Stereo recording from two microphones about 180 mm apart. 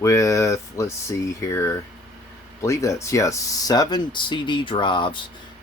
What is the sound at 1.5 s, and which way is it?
Speech, 15° left (ahead or behind).